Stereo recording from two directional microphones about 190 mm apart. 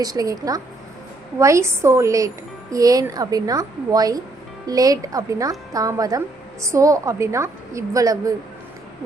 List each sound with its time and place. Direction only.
0.0 s a woman's voice: 20° right (ahead or behind)